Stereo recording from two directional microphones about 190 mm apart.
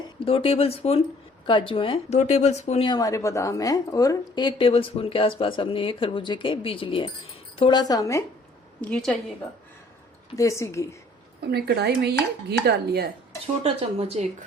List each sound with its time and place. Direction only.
0.2 s a woman's voice: 30° left (ahead or behind)
8.8 s a woman's voice: 5° left (ahead or behind)
10.3 s a woman's voice: 15° left (ahead or behind)
11.4 s speech: 60° right (ahead or behind)
13.6 s speech: 30° right (ahead or behind)